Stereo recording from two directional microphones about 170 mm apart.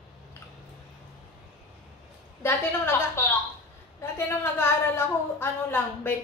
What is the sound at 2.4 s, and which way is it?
A woman's voice, 15° left (ahead or behind).